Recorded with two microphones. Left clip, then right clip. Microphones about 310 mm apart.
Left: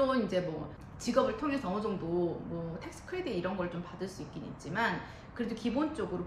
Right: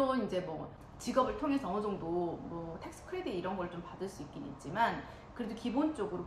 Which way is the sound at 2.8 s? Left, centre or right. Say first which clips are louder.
Left 2 dB; centre.